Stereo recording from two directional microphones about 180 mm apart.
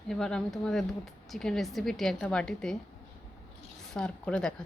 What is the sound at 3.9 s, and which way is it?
Speech, 5° left (ahead or behind).